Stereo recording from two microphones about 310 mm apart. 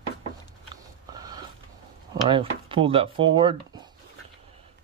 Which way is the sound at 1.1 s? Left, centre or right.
Centre.